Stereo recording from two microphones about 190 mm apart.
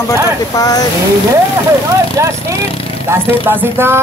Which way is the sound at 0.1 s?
20° left (ahead or behind).